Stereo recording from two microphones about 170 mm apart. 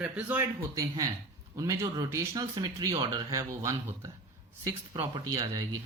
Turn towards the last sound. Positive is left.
turn(degrees=-20)  # may be behind; listen again after turning